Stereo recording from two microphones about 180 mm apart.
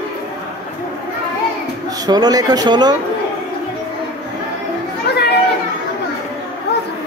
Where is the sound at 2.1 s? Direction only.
20° right (ahead or behind).